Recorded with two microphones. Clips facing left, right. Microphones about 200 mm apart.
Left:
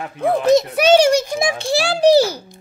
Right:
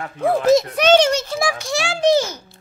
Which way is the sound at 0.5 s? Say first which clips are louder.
Left 1 dB; 5° left (ahead or behind).